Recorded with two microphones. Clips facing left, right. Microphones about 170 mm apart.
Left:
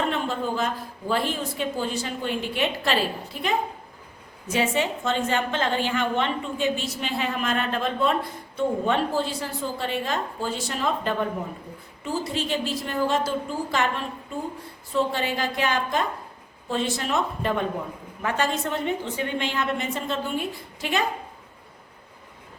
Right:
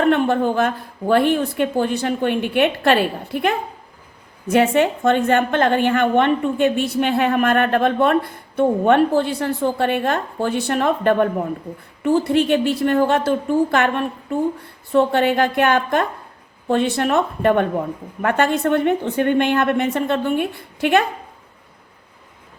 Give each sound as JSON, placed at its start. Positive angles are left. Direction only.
{"t": 0.0, "sound": "a woman's voice", "side_deg": -60}